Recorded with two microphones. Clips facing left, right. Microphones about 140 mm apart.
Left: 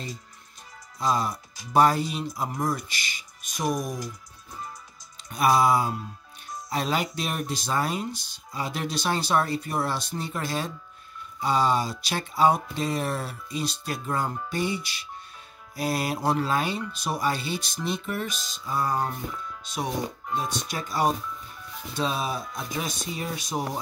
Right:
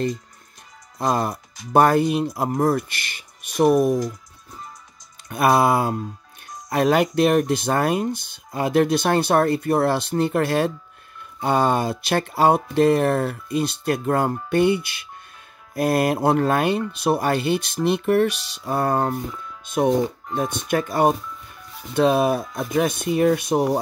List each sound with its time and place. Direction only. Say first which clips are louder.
0.9 s speech: right 4 dB; 55° right (ahead or behind)
5.3 s speech: right 4 dB; 55° right (ahead or behind)